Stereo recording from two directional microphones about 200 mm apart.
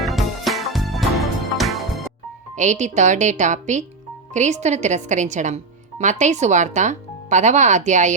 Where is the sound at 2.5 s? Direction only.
35° right (ahead or behind).